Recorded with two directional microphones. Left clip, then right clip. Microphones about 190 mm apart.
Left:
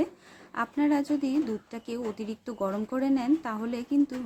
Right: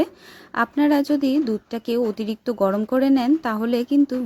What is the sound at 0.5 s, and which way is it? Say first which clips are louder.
A woman's voice: right 8 dB; 40° right (ahead or behind).